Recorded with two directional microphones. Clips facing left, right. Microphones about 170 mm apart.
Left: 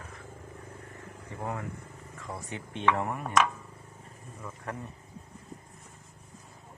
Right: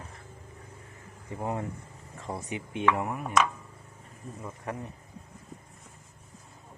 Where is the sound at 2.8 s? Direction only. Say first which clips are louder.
Even; centre (ahead or behind).